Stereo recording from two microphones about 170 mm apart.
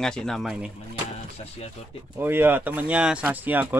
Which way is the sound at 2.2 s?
10° right (ahead or behind).